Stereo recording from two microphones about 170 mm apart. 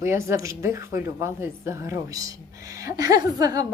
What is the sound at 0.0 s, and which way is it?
A woman's voice, 15° right (ahead or behind).